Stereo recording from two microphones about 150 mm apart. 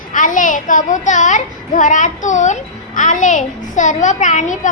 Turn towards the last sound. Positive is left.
turn(degrees=55)  # may be behind; listen again after turning